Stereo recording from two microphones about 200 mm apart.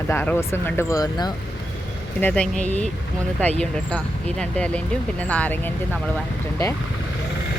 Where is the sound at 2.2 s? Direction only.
5° left (ahead or behind).